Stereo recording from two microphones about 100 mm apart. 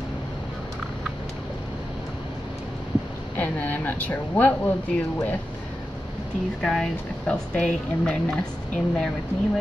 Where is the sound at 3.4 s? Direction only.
15° left (ahead or behind).